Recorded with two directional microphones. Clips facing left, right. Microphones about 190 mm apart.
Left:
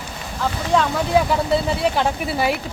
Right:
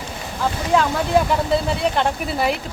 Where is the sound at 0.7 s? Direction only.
Centre (ahead or behind).